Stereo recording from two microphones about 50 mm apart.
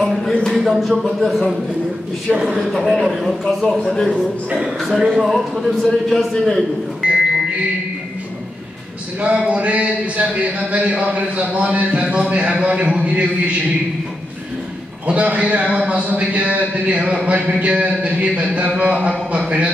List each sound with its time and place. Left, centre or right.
0.0 s a sound: centre
0.6 s a man's voice: centre
3.4 s a man's voice: centre
4.2 s a man's voice: right
4.7 s a man's voice: centre
5.8 s a man's voice: centre
9.2 s a man's voice: right
15.0 s a man's voice: right